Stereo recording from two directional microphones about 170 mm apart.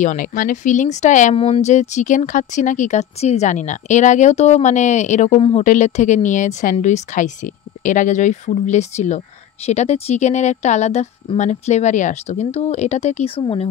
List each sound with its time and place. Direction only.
0.0 s a woman's voice: 50° left (ahead or behind); by 13.7 s 30° left (ahead or behind)